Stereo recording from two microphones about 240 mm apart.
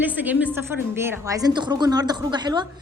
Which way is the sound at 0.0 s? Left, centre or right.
Centre.